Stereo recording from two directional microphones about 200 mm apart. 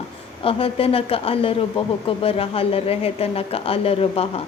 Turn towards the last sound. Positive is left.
turn(degrees=30)  # may be behind; listen again after turning